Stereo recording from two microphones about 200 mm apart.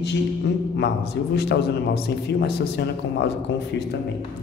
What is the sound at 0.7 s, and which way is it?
A man's voice, 55° left (ahead or behind).